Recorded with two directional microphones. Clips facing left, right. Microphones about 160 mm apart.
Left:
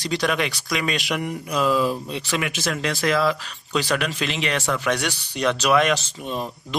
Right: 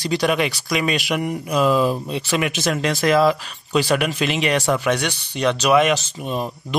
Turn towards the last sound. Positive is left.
turn(degrees=-5)  # may be behind; listen again after turning